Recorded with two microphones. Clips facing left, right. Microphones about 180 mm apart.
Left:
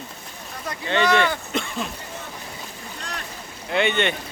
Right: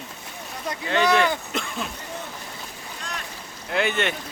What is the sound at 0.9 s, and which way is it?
Speech, centre (ahead or behind).